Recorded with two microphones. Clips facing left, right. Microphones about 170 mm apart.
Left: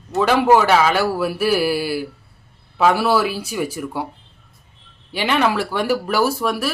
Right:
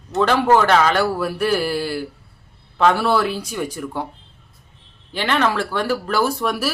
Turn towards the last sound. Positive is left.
turn(degrees=0)  # may be behind; listen again after turning